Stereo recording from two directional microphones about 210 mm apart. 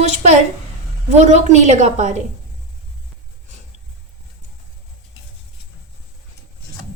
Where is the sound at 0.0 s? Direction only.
35° right (ahead or behind).